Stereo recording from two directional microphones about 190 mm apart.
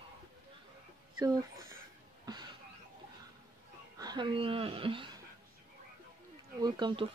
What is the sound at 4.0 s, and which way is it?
Speech, 20° right (ahead or behind).